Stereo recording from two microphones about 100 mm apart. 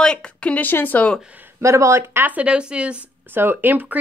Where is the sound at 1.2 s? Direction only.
15° right (ahead or behind).